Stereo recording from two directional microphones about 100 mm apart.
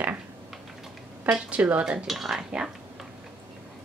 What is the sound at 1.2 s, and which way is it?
Speech, 15° right (ahead or behind).